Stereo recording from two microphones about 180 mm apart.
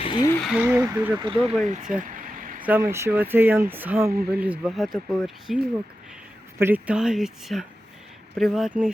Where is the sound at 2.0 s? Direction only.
50° right (ahead or behind).